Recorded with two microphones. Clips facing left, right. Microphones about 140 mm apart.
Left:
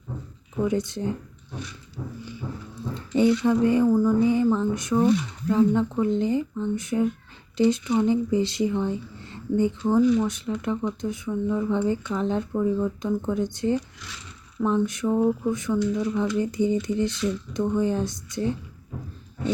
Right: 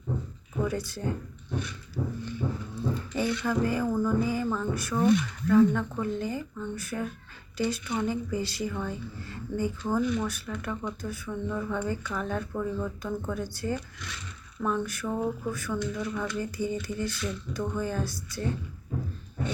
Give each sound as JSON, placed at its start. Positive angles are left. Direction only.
{"t": 0.6, "sound": "speech", "side_deg": 20}
{"t": 2.9, "sound": "speech", "side_deg": 25}
{"t": 3.8, "sound": "a sound", "side_deg": 10}
{"t": 4.2, "sound": "speech", "side_deg": 25}